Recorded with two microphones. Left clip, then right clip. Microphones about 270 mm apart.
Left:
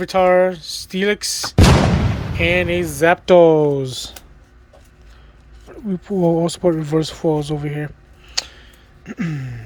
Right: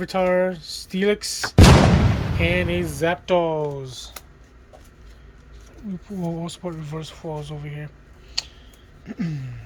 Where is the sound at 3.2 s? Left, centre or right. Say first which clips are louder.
Left 11 dB; left.